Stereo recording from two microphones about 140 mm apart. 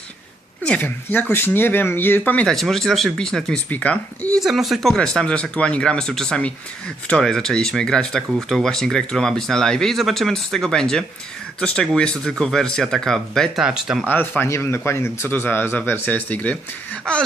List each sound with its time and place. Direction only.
0.6 s speech: 10° left (ahead or behind)
4.4 s speech: centre (ahead or behind)
14.1 s speech: 15° left (ahead or behind)